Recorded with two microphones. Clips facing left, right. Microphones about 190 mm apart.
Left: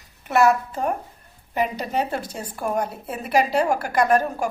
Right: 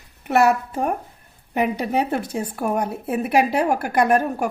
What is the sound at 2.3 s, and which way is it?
A woman's voice, 60° right (ahead or behind).